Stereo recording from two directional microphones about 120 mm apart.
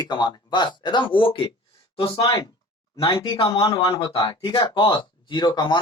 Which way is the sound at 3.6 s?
30° left (ahead or behind).